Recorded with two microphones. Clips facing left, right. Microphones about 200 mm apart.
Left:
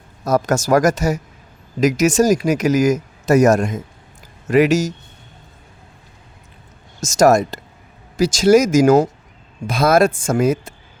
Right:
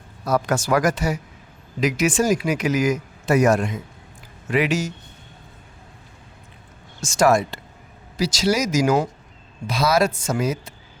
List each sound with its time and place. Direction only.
0.3 s speech: 45° left (ahead or behind)
7.0 s speech: 40° left (ahead or behind)